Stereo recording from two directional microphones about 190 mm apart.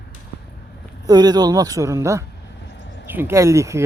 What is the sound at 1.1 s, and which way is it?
A man's voice, 20° right (ahead or behind).